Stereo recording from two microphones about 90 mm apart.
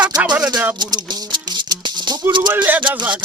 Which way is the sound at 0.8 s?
50° right (ahead or behind).